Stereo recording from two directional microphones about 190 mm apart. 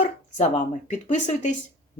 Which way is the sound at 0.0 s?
40° left (ahead or behind).